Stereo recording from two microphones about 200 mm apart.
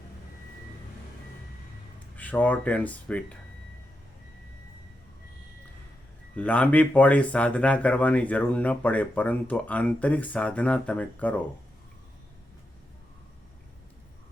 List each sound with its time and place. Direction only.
2.1 s speech: 10° left (ahead or behind)
6.3 s speech: 5° left (ahead or behind)